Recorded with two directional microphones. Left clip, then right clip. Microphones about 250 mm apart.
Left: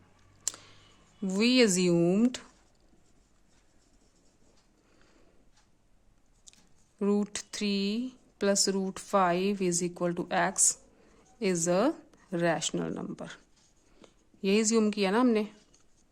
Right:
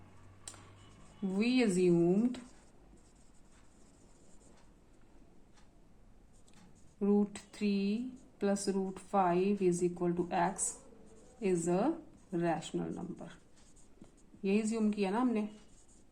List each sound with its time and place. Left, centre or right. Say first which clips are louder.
1.4 s a woman's voice: left 7 dB; left
7.0 s a woman's voice: left 3 dB; left
14.4 s a woman's voice: left 8 dB; left